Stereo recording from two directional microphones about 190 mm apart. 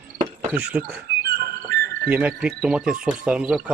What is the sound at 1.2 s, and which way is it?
Music, 55° right (ahead or behind).